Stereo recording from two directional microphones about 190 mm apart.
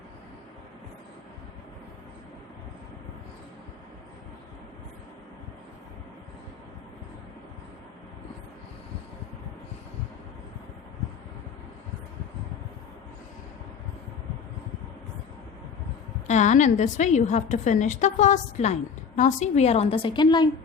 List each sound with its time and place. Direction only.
16.2 s a woman's voice: 40° left (ahead or behind); by 20.5 s 25° left (ahead or behind)